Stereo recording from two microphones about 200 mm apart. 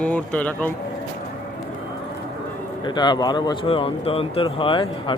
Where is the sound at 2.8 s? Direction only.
20° left (ahead or behind).